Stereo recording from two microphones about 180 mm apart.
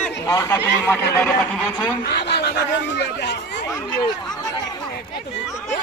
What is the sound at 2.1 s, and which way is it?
Snicker, 70° left (ahead or behind).